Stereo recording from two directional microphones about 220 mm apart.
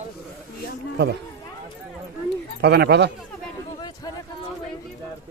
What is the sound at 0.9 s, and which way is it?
Speech, 50° right (ahead or behind).